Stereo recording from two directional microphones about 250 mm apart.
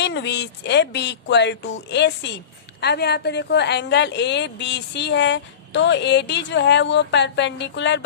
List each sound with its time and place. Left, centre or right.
0.0 s a woman's voice: left